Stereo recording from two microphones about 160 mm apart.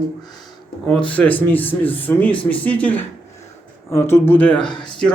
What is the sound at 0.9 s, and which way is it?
A man's voice, 5° left (ahead or behind).